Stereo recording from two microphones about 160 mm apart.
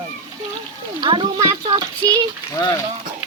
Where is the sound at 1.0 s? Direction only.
30° right (ahead or behind).